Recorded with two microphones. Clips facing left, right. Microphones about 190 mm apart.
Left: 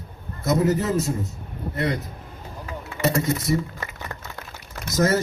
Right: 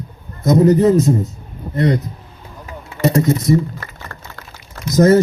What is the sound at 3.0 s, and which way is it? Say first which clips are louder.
Speech: right 7 dB; 30° right (ahead or behind).